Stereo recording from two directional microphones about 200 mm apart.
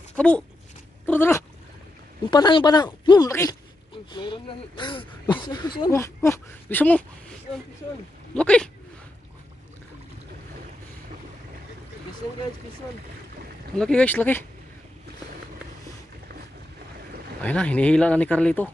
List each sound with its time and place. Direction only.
0.1 s a sound: 5° left (ahead or behind)
1.0 s dog: 10° left (ahead or behind)
2.3 s speech: 20° left (ahead or behind)
8.4 s speech: 5° left (ahead or behind)
13.7 s speech: 5° left (ahead or behind)
17.4 s speech: 5° left (ahead or behind)